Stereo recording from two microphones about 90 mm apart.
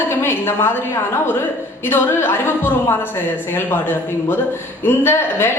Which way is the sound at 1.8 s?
25° left (ahead or behind).